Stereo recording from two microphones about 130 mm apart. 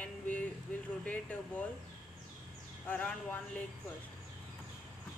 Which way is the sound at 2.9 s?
10° left (ahead or behind).